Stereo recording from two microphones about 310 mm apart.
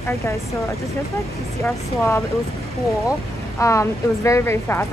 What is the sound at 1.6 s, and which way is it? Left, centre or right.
Speech, centre.